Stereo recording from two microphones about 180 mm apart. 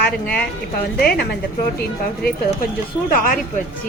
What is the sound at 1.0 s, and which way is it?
Speech, 55° left (ahead or behind).